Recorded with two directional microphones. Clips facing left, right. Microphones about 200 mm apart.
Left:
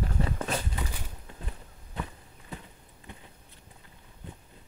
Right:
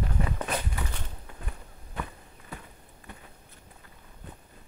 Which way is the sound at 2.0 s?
25° left (ahead or behind).